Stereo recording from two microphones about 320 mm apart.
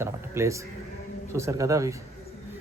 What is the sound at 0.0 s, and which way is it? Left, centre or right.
Speech, centre.